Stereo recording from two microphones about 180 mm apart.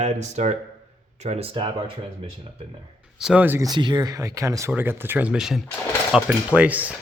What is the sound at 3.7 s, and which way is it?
Speech, 25° right (ahead or behind).